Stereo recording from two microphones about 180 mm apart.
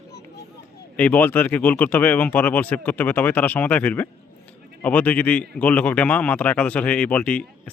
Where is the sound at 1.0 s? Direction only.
10° left (ahead or behind).